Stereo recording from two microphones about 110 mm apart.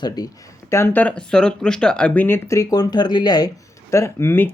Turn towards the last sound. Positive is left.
turn(degrees=20)  # may be behind; listen again after turning